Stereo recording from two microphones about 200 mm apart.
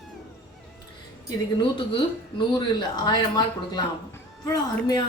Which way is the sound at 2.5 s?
20° left (ahead or behind).